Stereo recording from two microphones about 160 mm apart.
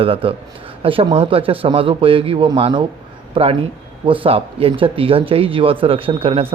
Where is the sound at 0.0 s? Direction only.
35° right (ahead or behind).